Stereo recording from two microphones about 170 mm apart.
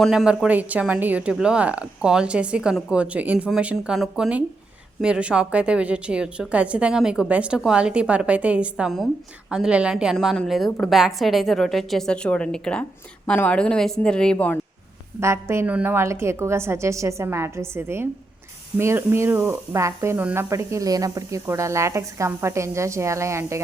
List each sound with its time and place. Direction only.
0.0 s a woman's voice: centre (ahead or behind)
15.2 s speech: 15° right (ahead or behind)